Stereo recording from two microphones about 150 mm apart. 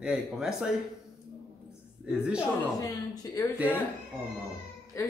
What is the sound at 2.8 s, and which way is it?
Speech, 20° left (ahead or behind).